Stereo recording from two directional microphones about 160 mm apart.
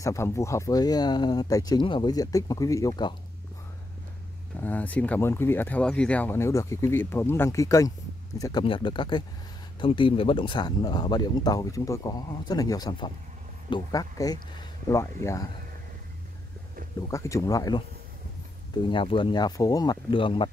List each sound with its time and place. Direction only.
0.0 s speech: 20° left (ahead or behind)
4.6 s speech: 10° left (ahead or behind)
8.6 s speech: 30° left (ahead or behind)
17.1 s speech: 20° left (ahead or behind)